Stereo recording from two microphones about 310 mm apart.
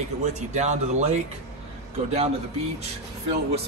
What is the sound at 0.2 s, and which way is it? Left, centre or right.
Speech, right.